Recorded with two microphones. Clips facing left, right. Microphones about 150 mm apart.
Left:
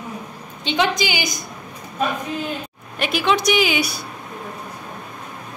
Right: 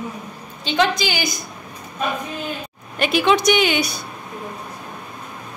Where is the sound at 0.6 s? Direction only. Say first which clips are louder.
Right 1 dB; 15° left (ahead or behind).